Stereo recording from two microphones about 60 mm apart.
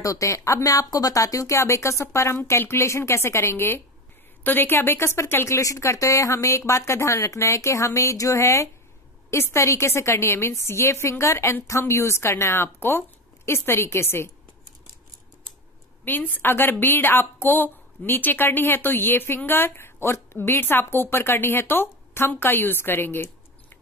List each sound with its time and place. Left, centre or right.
0.0 s a woman's voice: left
5.6 s a woman's voice: left
16.0 s a woman's voice: left